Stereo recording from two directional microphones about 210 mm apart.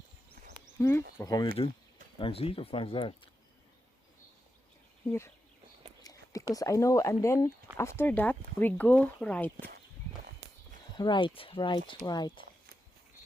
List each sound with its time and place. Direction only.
0.8 s speech: 10° left (ahead or behind)
6.0 s a sound: 15° left (ahead or behind)
6.5 s speech: 15° left (ahead or behind)
10.9 s speech: 20° left (ahead or behind)